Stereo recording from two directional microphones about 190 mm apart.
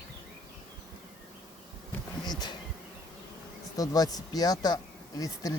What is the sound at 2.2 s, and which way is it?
Bee, 20° left (ahead or behind).